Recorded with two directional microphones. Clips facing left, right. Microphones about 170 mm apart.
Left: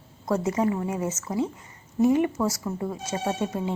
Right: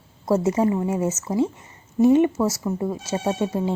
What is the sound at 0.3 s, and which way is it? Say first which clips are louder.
Speech: right 4 dB; 25° right (ahead or behind).